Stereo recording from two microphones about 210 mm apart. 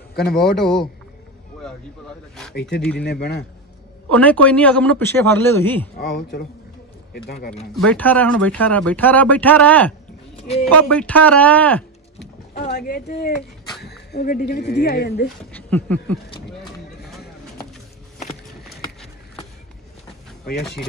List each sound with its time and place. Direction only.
0.1 s a man's voice: 45° left (ahead or behind)
0.4 s a man's voice: centre (ahead or behind)
3.0 s speech: 50° left (ahead or behind)
4.1 s speech: 5° left (ahead or behind)
5.9 s speech: 45° left (ahead or behind)
7.7 s speech: 5° left (ahead or behind)
12.7 s speech: 50° left (ahead or behind)
15.5 s speech: 5° left (ahead or behind)